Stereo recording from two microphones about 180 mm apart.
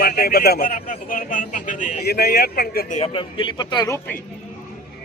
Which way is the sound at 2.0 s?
60° left (ahead or behind).